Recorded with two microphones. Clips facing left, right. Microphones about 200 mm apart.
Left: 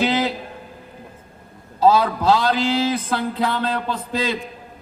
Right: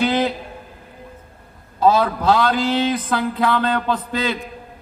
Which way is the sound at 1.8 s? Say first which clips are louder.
Even; 50° right (ahead or behind).